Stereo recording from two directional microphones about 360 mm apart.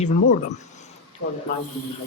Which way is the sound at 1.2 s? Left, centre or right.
Left.